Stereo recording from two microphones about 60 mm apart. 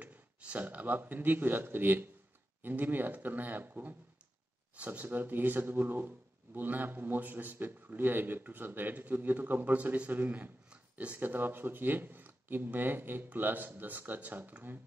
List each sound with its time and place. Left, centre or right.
0.0 s speech: right
10.7 s a sound: right
11.1 s speech: right